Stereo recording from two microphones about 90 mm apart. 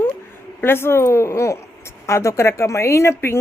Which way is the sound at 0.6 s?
25° left (ahead or behind).